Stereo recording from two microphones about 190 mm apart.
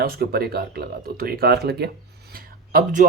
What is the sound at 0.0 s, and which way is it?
Speech, 50° right (ahead or behind).